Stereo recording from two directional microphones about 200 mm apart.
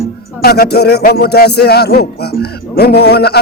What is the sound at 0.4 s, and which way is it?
Speech, 50° left (ahead or behind).